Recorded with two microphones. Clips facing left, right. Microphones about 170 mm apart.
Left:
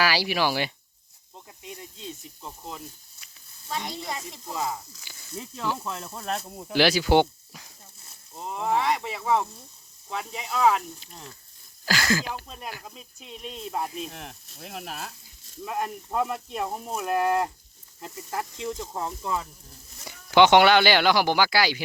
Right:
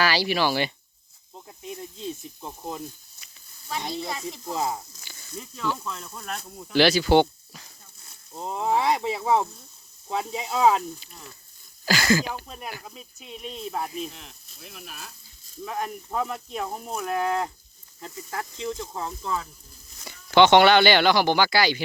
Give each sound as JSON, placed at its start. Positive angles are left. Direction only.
{"t": 0.0, "sound": "speech", "side_deg": 10}
{"t": 1.3, "sound": "snake", "side_deg": -15}
{"t": 3.7, "sound": "speech", "side_deg": -5}
{"t": 4.5, "sound": "speech", "side_deg": -20}
{"t": 5.8, "sound": "speech", "side_deg": 30}
{"t": 6.7, "sound": "a sound", "side_deg": 10}
{"t": 8.4, "sound": "speech", "side_deg": -15}
{"t": 11.9, "sound": "speech", "side_deg": 0}
{"t": 14.1, "sound": "speech", "side_deg": 65}
{"t": 15.6, "sound": "speech", "side_deg": 5}